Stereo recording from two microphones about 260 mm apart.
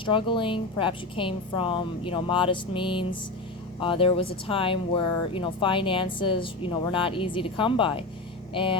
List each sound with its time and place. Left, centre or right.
0.0 s a woman's voice: centre